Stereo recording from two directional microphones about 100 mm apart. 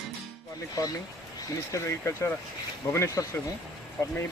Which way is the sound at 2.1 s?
35° left (ahead or behind).